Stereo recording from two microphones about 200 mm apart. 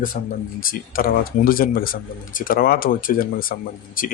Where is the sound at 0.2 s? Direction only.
45° left (ahead or behind).